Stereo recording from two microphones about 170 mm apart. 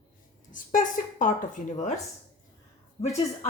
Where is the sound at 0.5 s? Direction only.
50° left (ahead or behind).